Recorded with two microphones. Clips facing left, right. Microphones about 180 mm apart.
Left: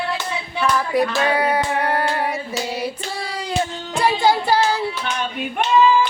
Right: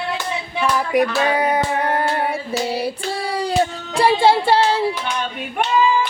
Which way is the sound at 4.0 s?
30° right (ahead or behind).